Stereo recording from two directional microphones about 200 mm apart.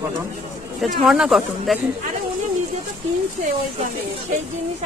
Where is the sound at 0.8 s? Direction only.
5° right (ahead or behind).